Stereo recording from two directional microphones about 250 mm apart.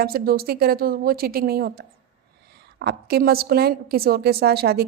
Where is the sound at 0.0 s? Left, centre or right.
Right.